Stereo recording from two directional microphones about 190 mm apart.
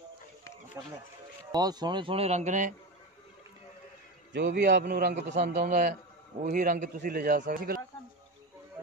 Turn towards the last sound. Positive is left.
turn(degrees=-50)  # may be behind; listen again after turning